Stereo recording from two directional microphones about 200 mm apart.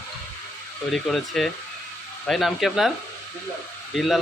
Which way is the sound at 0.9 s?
Centre (ahead or behind).